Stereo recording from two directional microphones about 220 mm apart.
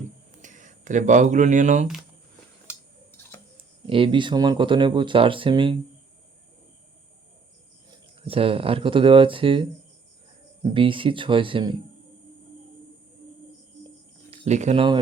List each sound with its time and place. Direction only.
0.4 s speech: 35° right (ahead or behind)
3.1 s tick-tock: 10° left (ahead or behind)
3.8 s speech: 25° right (ahead or behind)
8.2 s speech: 25° right (ahead or behind)
14.3 s speech: 30° right (ahead or behind)